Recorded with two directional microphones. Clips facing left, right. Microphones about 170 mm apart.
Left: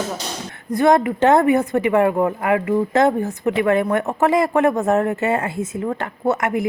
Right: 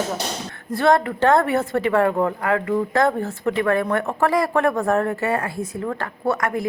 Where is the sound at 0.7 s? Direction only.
20° left (ahead or behind).